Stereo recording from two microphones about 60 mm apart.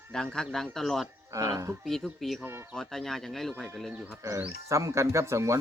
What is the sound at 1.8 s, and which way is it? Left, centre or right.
Speech, centre.